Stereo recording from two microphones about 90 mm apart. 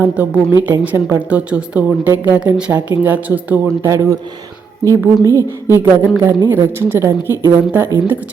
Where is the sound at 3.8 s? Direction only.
35° right (ahead or behind).